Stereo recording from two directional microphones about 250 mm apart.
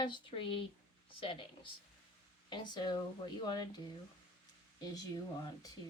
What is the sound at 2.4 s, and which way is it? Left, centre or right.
Speech, centre.